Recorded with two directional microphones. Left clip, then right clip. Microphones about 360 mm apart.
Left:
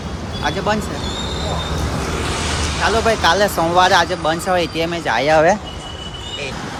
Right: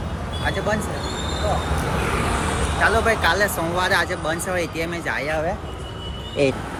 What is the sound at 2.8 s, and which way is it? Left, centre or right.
Speech, centre.